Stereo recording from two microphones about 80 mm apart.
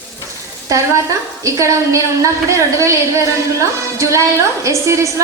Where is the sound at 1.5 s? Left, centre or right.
Right.